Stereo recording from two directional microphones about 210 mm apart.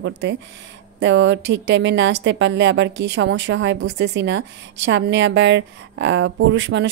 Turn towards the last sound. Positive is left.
turn(degrees=-60)  # may be behind; listen again after turning